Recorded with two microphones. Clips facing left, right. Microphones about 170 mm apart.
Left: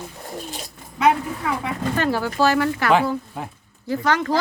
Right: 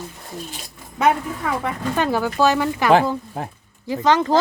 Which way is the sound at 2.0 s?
15° right (ahead or behind).